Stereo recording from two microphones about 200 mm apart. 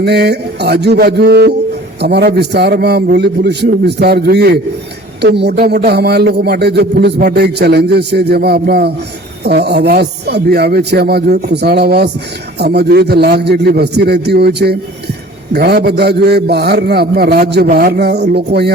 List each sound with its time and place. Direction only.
0.0 s a man's voice: 55° right (ahead or behind)